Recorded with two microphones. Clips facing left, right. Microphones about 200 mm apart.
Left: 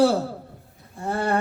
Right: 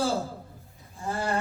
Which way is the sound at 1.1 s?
60° left (ahead or behind).